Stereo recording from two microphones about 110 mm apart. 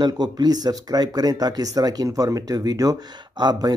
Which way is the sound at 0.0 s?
40° right (ahead or behind).